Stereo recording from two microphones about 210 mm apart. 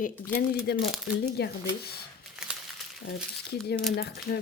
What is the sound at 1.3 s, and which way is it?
Speech, 55° left (ahead or behind).